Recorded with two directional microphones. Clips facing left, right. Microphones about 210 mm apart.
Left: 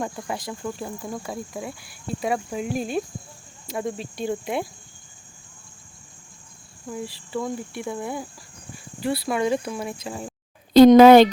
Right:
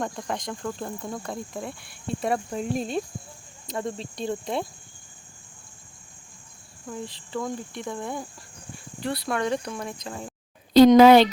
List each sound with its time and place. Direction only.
0.0 s speech: 5° left (ahead or behind)
6.8 s speech: 5° left (ahead or behind)
10.9 s speech: 50° left (ahead or behind)